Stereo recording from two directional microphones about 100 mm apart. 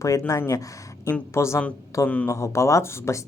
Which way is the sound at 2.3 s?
30° left (ahead or behind).